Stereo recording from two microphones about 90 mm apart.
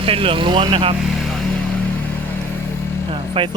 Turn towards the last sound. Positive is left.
turn(degrees=-75)  # may be behind; listen again after turning